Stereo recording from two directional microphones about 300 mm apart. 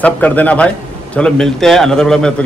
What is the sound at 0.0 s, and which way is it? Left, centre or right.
Speech, centre.